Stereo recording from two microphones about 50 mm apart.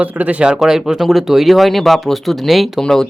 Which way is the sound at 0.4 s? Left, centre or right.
Centre.